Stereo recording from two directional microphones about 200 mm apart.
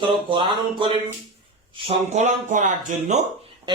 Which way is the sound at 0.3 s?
25° right (ahead or behind).